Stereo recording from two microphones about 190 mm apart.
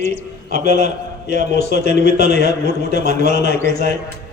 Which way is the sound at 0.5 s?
60° left (ahead or behind).